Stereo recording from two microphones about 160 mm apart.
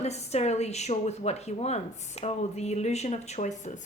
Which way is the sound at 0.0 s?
40° left (ahead or behind).